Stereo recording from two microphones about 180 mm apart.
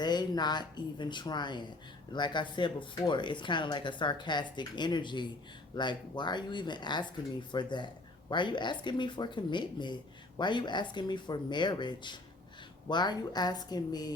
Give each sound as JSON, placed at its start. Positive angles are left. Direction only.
{"t": 0.0, "sound": "speech", "side_deg": 25}